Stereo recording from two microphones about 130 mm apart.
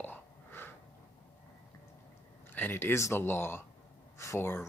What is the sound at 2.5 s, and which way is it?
Speech, 15° left (ahead or behind).